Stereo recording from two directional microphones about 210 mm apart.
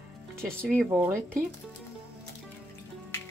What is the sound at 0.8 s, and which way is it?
Speech, 10° right (ahead or behind).